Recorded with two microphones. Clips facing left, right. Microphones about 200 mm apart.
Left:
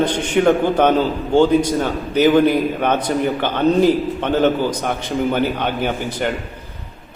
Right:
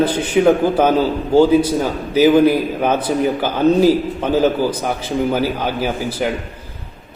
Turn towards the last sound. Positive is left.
turn(degrees=-5)  # may be behind; listen again after turning